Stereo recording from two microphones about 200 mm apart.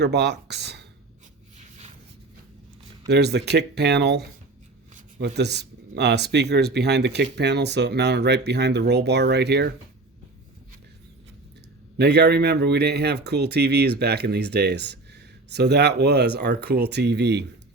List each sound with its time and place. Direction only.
0.0 s speech: 55° right (ahead or behind)
1.5 s a sound: 35° right (ahead or behind)
3.1 s speech: 55° right (ahead or behind)
5.4 s speech: 55° right (ahead or behind)
11.9 s speech: 55° right (ahead or behind)